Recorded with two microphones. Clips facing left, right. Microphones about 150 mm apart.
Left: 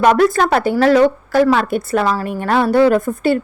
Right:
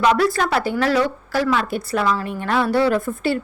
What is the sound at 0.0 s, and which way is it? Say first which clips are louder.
A woman's voice: left 5 dB; 50° left (ahead or behind).